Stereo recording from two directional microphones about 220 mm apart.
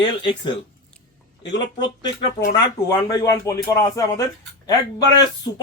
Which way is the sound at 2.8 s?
15° left (ahead or behind).